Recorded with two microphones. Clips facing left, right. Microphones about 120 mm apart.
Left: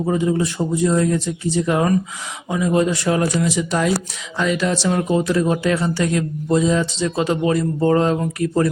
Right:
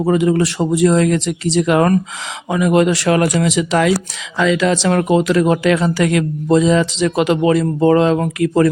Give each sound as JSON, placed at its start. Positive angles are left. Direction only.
{"t": 0.0, "sound": "speech", "side_deg": -80}
{"t": 2.5, "sound": "speech", "side_deg": -75}